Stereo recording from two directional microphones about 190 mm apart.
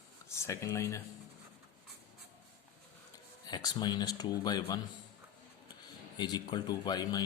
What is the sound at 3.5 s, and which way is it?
Speech, 20° left (ahead or behind).